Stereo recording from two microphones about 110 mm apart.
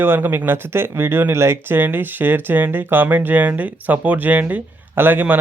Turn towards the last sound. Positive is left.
turn(degrees=-15)  # may be behind; listen again after turning